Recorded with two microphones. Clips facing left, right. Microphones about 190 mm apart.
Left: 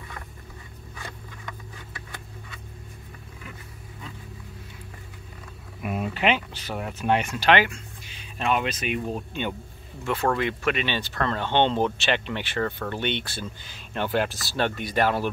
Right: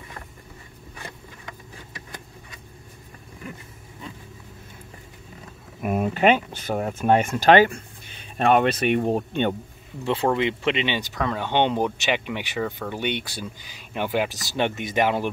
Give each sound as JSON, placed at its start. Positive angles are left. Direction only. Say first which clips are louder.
{"t": 5.8, "sound": "speech", "louder": "right 6 dB", "side_deg": -45}
{"t": 10.0, "sound": "speech", "louder": "right 3 dB", "side_deg": -20}